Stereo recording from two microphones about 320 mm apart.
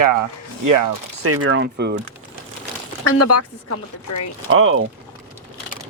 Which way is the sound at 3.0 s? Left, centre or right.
Left.